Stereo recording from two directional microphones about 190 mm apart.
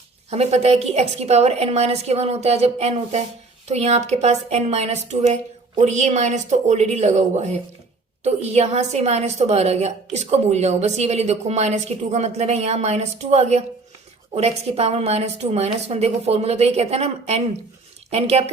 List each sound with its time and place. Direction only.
0.3 s a woman's voice: 35° right (ahead or behind)